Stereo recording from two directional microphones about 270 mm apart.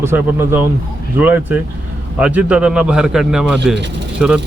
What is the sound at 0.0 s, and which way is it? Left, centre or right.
Speech, centre.